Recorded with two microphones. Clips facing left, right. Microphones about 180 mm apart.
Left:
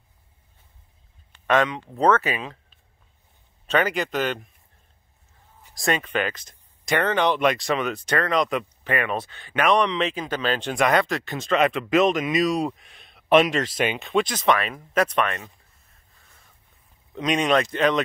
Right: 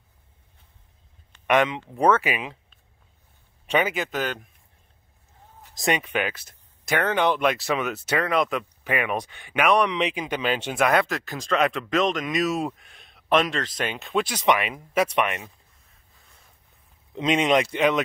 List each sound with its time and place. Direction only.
1.5 s speech: 15° right (ahead or behind)
3.6 s speech: 10° right (ahead or behind)
5.8 s speech: 15° right (ahead or behind)
17.1 s speech: 25° right (ahead or behind)